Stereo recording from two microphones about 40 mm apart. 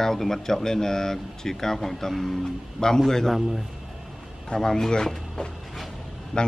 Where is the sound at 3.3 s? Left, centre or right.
Centre.